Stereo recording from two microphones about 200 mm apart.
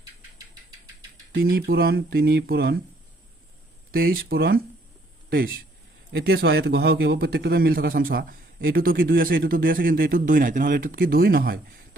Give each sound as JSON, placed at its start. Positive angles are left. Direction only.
{"t": 1.3, "sound": "a man's voice", "side_deg": -50}
{"t": 3.9, "sound": "a man's voice", "side_deg": -50}